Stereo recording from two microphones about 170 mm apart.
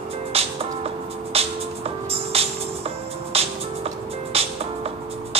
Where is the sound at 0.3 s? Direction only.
35° right (ahead or behind).